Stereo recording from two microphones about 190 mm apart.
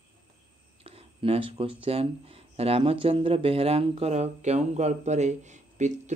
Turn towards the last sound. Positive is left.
turn(degrees=-40)  # may be behind; listen again after turning